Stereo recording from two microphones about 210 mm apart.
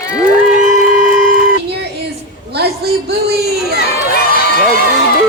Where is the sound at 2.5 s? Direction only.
50° right (ahead or behind).